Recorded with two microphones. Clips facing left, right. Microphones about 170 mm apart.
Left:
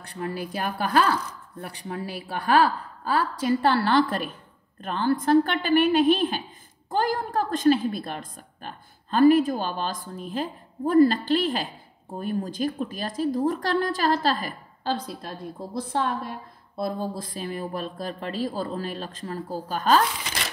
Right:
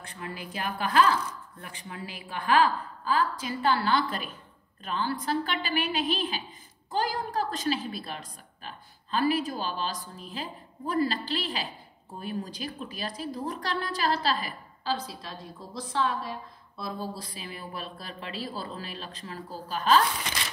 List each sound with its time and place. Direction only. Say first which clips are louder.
0.1 s speech: left 8 dB; 40° left (ahead or behind)
3.1 s a woman's voice: left 5 dB; 50° left (ahead or behind)